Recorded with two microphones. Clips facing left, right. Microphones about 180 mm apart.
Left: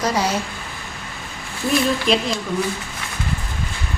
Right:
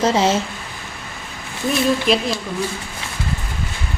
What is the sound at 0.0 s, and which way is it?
Speech, 25° right (ahead or behind).